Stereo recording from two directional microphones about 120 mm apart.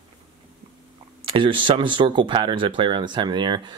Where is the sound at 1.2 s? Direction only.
45° right (ahead or behind).